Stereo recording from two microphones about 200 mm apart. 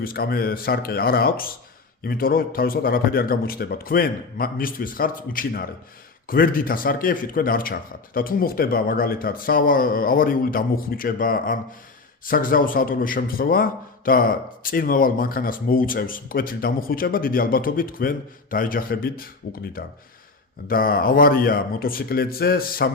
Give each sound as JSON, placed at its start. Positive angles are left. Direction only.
{"t": 0.0, "sound": "a man's voice", "side_deg": 50}
{"t": 20.7, "sound": "a man's voice", "side_deg": 45}